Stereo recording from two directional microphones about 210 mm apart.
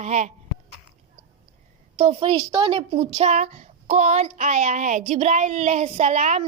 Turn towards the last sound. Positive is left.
turn(degrees=-30)  # may be behind; listen again after turning